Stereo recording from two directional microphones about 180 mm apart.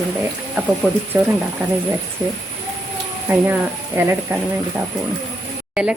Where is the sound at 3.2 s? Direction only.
10° right (ahead or behind).